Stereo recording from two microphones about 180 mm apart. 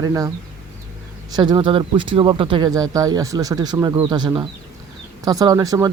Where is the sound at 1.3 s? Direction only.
25° right (ahead or behind).